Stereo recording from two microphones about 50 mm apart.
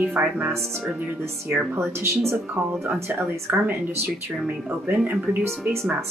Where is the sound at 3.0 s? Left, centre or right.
Right.